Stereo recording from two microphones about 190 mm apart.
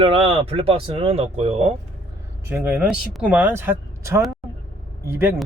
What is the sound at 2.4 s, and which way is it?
Speech, 10° right (ahead or behind).